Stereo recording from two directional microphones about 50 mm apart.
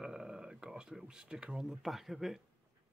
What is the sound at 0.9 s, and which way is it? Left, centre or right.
Speech, centre.